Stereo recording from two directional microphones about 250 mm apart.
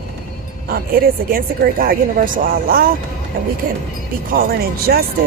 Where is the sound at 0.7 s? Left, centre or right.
Right.